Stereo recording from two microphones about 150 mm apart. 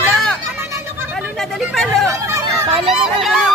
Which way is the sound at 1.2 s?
Centre (ahead or behind).